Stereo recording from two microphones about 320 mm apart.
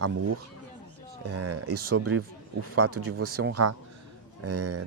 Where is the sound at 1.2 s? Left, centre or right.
Right.